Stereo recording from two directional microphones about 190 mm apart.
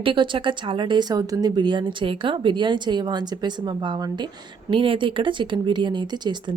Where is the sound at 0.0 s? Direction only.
25° right (ahead or behind).